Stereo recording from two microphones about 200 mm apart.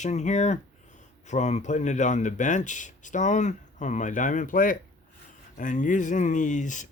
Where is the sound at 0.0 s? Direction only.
35° left (ahead or behind).